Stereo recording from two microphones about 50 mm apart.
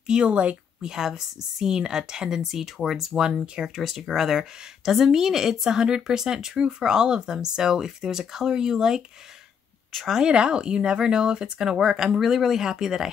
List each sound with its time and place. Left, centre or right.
0.0 s speech: centre
0.3 s speech: right
0.8 s speech: centre
10.1 s speech: centre